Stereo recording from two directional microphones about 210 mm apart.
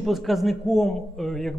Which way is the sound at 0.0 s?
Centre (ahead or behind).